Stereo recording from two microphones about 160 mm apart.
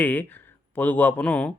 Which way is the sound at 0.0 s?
10° left (ahead or behind).